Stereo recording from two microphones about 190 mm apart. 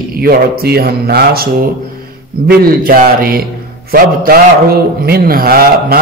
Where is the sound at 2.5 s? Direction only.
50° right (ahead or behind).